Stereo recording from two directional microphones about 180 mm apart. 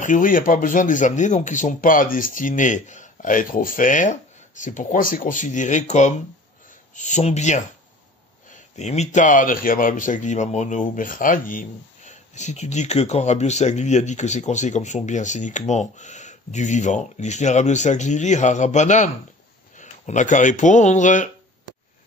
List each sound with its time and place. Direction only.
0.0 s speech: 45° left (ahead or behind)
8.7 s speech: 40° left (ahead or behind)